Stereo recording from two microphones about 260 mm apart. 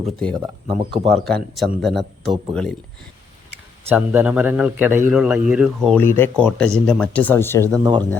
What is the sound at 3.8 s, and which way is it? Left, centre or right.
A man's voice, centre.